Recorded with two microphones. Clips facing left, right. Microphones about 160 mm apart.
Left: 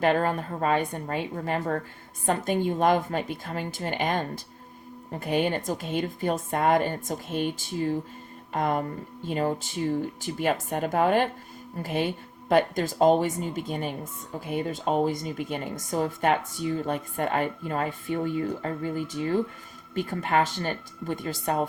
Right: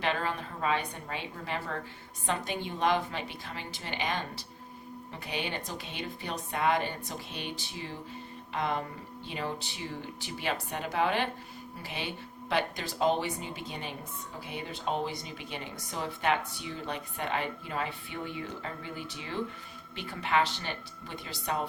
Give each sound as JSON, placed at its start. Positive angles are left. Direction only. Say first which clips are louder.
{"t": 0.0, "sound": "a woman's voice", "louder": "left 8 dB", "side_deg": 45}